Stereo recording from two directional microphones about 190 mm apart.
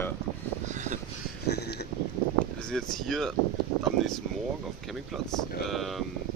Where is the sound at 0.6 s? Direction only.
40° right (ahead or behind).